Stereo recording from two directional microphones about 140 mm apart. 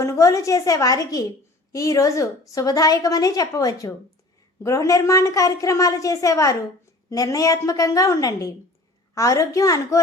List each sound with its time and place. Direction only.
0.0 s a woman's voice: 20° left (ahead or behind)